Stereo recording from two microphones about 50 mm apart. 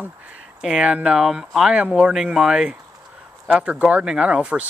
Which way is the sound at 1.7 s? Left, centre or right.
Right.